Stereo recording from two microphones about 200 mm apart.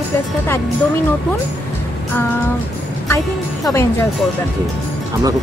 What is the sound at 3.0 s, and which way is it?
Speech, 15° left (ahead or behind).